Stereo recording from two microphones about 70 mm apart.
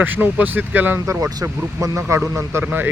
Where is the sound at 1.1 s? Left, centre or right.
Right.